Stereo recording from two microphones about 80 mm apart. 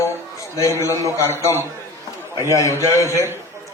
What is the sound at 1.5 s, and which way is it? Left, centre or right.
Speech, left.